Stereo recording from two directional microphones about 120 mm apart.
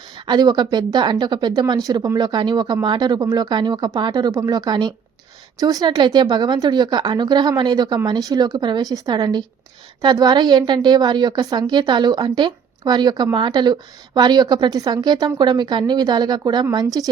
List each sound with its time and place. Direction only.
0.3 s speech: 35° right (ahead or behind)